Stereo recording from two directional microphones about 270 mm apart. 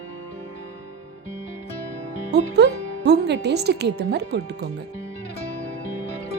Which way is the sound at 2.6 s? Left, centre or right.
Right.